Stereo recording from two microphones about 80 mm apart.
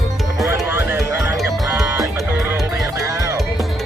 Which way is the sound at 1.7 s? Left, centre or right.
Right.